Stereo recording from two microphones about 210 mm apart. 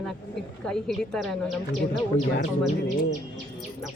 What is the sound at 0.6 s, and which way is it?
Speech, 5° left (ahead or behind).